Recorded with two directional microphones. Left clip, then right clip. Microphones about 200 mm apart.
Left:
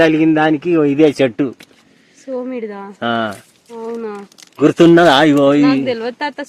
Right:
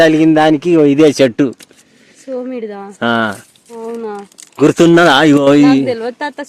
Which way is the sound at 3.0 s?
50° right (ahead or behind).